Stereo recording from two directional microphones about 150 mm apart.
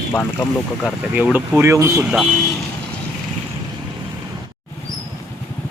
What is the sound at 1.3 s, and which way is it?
Speech, 15° right (ahead or behind).